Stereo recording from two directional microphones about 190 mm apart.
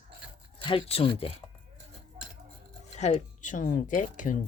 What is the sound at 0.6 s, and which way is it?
Speech, 30° left (ahead or behind).